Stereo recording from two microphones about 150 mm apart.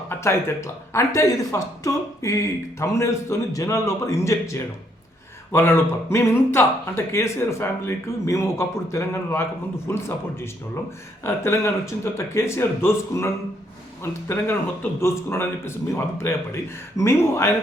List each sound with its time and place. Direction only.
0.1 s speech: 15° left (ahead or behind)
11.2 s speech: 20° left (ahead or behind)